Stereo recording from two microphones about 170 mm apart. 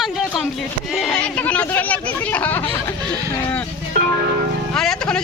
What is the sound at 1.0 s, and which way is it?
Speech, 5° left (ahead or behind).